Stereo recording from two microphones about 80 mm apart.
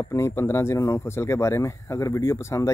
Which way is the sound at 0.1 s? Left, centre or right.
Left.